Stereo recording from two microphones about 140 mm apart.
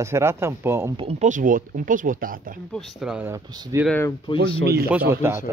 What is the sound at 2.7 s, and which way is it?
Speech, centre (ahead or behind).